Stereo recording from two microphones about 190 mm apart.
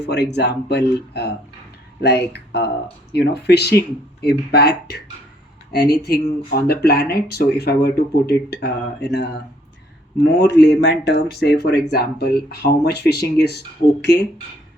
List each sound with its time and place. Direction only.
0.0 s speech: 60° left (ahead or behind)
10.3 s speech: 65° left (ahead or behind)